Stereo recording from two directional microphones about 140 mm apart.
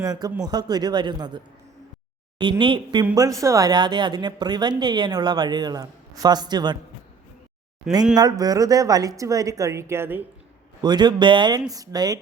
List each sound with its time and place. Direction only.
0.0 s a woman's voice: 25° right (ahead or behind)
2.4 s a woman's voice: 35° right (ahead or behind)
8.1 s a woman's voice: 25° right (ahead or behind)
10.8 s a woman's voice: 30° right (ahead or behind)